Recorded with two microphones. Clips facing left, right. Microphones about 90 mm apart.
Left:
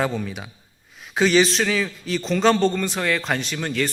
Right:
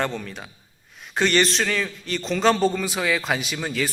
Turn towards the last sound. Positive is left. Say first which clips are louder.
# left 2 dB
turn(degrees=-5)  # may be behind; listen again after turning